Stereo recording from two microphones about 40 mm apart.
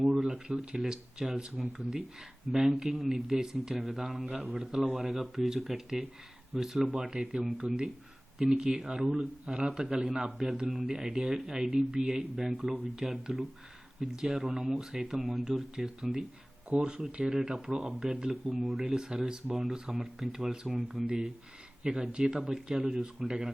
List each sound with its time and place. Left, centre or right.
0.0 s speech: centre
4.4 s speech: centre
5.1 s speech: centre
6.9 s speech: centre
15.1 s speech: centre; by 17.3 s right
17.3 s speech: centre
17.7 s speech: right
18.5 s speech: centre; by 19.5 s right
19.7 s speech: centre
21.8 s speech: centre